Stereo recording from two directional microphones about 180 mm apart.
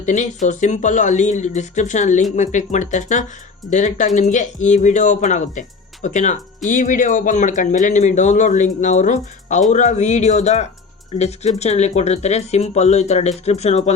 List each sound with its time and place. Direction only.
0.0 s speech: 40° left (ahead or behind)